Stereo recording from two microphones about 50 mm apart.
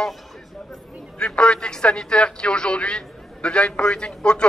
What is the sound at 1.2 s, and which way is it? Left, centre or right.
A man's voice, centre.